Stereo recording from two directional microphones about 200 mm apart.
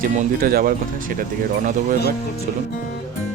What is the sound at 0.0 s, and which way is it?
Speech, 45° right (ahead or behind).